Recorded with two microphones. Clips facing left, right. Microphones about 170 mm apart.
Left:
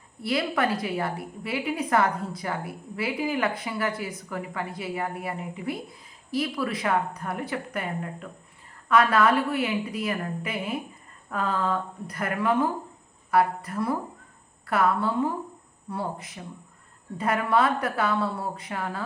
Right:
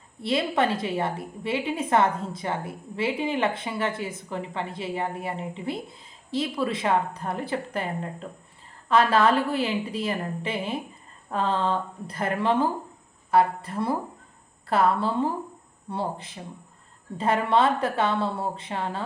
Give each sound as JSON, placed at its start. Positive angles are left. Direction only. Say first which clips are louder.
{"t": 0.2, "sound": "a woman's voice", "louder": "right 2 dB", "side_deg": -25}